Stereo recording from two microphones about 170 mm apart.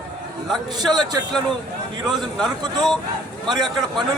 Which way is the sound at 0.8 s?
25° right (ahead or behind).